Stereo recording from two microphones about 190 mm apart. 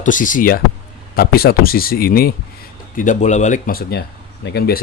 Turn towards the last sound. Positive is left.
turn(degrees=60)  # may be behind; listen again after turning